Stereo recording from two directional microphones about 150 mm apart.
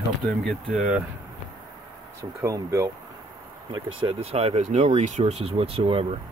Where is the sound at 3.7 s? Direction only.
35° right (ahead or behind).